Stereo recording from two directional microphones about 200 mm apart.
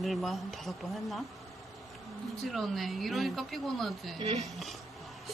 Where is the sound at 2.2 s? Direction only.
Centre (ahead or behind).